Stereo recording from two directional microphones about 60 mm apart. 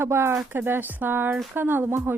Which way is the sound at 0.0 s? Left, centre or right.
Right.